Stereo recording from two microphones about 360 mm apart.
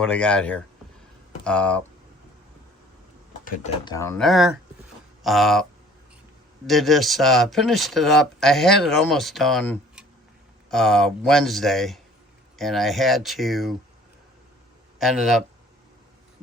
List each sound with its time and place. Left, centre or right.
0.0 s speech: centre
3.4 s speech: centre
3.9 s speech: centre
6.7 s speech: centre
14.9 s speech: centre